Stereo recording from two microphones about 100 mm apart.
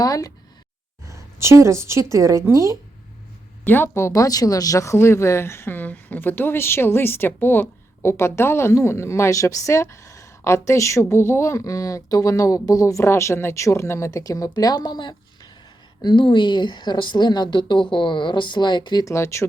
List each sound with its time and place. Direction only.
0.0 s speech: 40° left (ahead or behind)
1.0 s a woman's voice: 30° right (ahead or behind)
3.7 s a woman's voice: 20° left (ahead or behind); by 19.0 s 50° left (ahead or behind)
19.0 s speech: 30° left (ahead or behind)